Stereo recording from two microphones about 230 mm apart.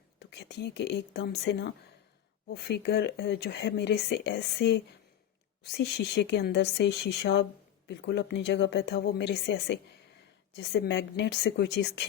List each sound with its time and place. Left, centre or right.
0.3 s speech: left